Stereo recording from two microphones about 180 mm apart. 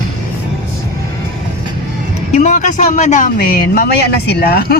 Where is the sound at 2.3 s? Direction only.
40° left (ahead or behind).